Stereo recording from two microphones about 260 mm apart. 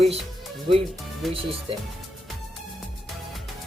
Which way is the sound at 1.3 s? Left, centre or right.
Right.